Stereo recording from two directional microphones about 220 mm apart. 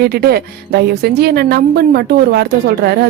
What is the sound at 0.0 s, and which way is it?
Speech, 45° right (ahead or behind).